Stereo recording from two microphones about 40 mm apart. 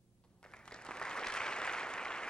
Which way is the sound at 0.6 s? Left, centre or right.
Left.